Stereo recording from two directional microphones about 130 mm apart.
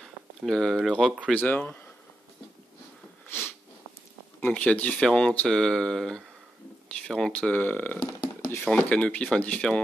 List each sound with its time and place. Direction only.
0.0 s speech: centre (ahead or behind)
1.4 s speech: 15° left (ahead or behind)
3.3 s a sound: 15° left (ahead or behind)
4.4 s speech: 10° left (ahead or behind)